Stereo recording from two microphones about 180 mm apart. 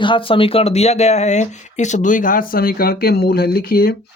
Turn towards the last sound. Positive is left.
turn(degrees=55)  # may be behind; listen again after turning